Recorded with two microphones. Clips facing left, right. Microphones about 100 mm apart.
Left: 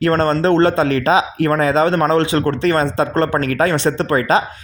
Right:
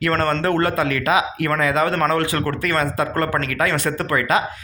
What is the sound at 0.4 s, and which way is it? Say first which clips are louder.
Speech: left 6 dB; 25° left (ahead or behind).